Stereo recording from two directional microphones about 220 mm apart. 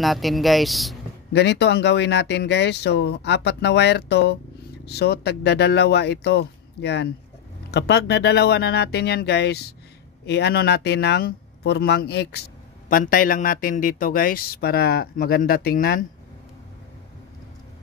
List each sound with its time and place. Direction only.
0.0 s speech: centre (ahead or behind)
1.3 s a man's voice: 50° left (ahead or behind)